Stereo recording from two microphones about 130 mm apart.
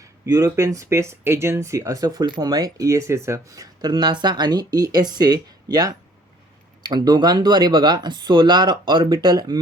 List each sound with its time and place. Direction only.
0.3 s speech: 25° right (ahead or behind)